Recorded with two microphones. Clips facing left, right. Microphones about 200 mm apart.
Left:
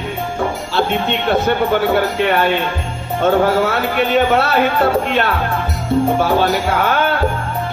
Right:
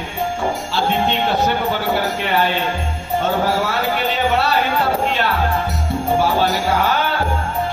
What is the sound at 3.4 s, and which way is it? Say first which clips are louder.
A man's voice: left 4 dB; 55° left (ahead or behind).